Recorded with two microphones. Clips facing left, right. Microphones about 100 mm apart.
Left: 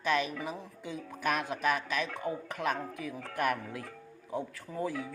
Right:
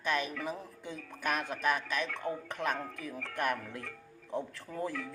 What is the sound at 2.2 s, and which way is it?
Speech, 15° left (ahead or behind).